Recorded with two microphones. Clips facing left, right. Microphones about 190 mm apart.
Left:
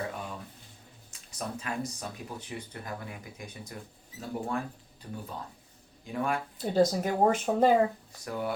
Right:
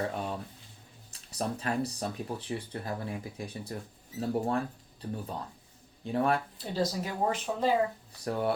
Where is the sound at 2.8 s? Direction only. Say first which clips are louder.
Right 4 dB; 30° right (ahead or behind).